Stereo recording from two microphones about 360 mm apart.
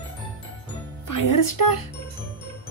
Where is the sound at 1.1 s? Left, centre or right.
Left.